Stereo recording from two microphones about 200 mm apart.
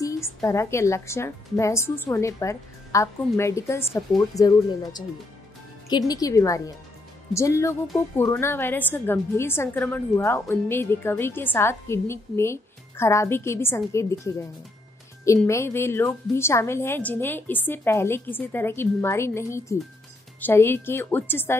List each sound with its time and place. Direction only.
0.0 s a woman's voice: 15° left (ahead or behind)